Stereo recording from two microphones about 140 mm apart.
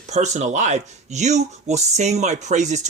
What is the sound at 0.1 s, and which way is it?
Speech, 55° right (ahead or behind).